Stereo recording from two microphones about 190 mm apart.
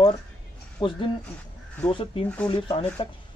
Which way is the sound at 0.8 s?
25° left (ahead or behind).